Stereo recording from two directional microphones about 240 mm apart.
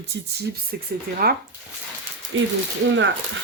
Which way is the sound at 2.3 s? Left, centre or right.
Right.